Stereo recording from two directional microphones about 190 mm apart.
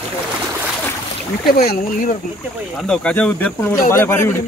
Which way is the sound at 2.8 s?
5° left (ahead or behind).